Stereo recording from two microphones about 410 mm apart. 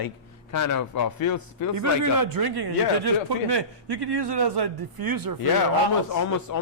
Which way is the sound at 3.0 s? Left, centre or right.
Right.